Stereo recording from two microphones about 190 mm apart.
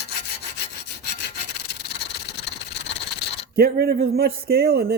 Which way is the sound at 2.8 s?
60° left (ahead or behind).